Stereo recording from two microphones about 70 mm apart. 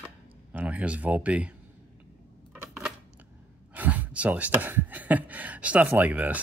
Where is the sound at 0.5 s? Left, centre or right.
Centre.